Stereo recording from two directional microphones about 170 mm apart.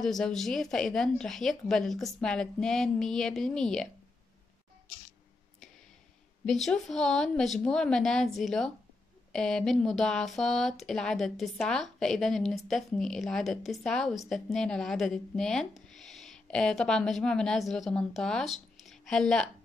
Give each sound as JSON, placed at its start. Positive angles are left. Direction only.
{"t": 0.0, "sound": "speech", "side_deg": 0}
{"t": 6.4, "sound": "speech", "side_deg": 0}